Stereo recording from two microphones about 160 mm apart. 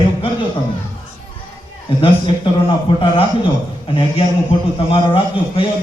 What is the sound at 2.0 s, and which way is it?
A man's voice, 30° left (ahead or behind).